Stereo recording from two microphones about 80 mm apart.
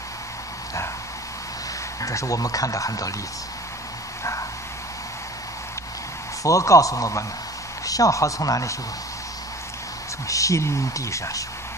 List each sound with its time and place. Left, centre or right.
2.0 s speech: left
4.2 s a sound: left
6.4 s speech: left
10.2 s speech: left